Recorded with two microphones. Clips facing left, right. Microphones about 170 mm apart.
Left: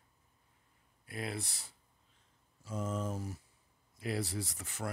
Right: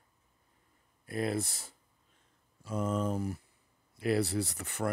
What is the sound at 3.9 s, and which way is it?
Speech, 65° right (ahead or behind).